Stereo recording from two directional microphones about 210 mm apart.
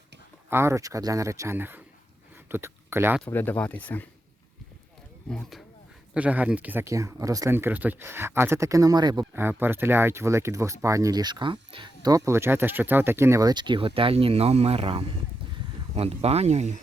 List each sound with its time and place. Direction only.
0.5 s speech: 15° right (ahead or behind)
3.2 s speech: 10° left (ahead or behind)
5.3 s speech: centre (ahead or behind); by 16.8 s 35° right (ahead or behind)